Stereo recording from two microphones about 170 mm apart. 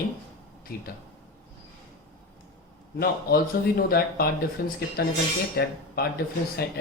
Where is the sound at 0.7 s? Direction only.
60° left (ahead or behind).